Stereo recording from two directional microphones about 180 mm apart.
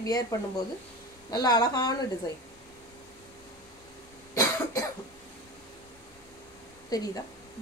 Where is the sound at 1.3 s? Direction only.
20° left (ahead or behind).